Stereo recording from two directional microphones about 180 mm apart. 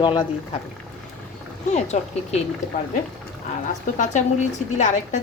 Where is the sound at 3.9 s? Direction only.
40° left (ahead or behind).